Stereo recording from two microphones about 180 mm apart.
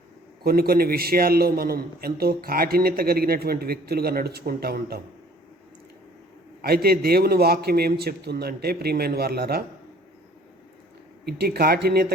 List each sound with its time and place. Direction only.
0.4 s a man's voice: 60° right (ahead or behind)
6.6 s a man's voice: 60° right (ahead or behind)
11.3 s a man's voice: 60° right (ahead or behind)